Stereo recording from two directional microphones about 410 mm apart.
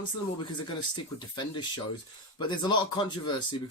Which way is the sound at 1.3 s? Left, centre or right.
Centre.